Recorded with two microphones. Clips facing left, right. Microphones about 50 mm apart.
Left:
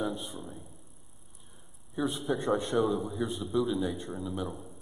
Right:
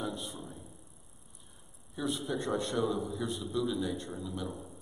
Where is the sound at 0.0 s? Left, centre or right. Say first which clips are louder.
Left 4 dB; centre.